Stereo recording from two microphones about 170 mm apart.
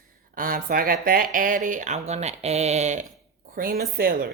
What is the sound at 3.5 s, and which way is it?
Speech, 55° right (ahead or behind).